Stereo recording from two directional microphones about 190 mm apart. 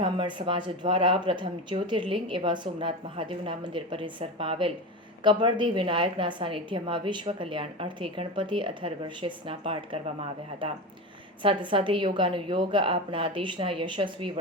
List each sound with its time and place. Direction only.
0.0 s a woman's voice: 25° right (ahead or behind)
11.4 s a woman's voice: 25° right (ahead or behind)